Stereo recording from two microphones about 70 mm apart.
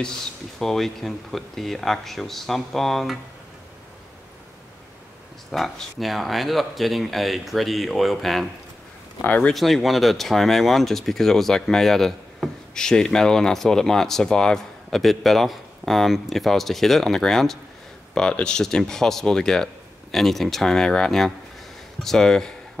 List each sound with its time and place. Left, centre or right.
0.0 s speech: centre
5.5 s speech: centre
9.2 s speech: left
9.5 s speech: centre